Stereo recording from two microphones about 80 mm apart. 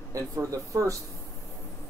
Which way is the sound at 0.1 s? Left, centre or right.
Right.